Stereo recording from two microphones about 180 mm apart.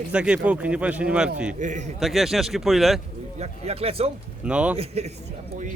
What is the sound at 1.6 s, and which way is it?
Speech, 40° right (ahead or behind).